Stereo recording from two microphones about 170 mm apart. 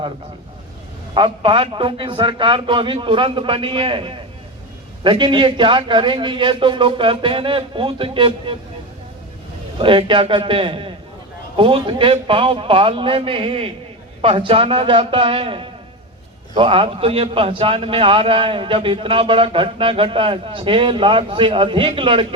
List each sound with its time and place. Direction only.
1.1 s a man's voice: 30° right (ahead or behind)
9.7 s a man's voice: 30° right (ahead or behind)